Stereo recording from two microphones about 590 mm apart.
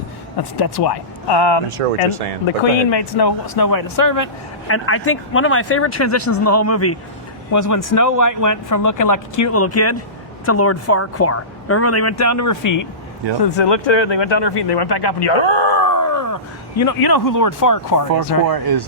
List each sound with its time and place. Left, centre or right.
0.3 s speech: left
2.9 s speech: left
4.7 s speech: left
13.4 s speech: left
18.4 s speech: right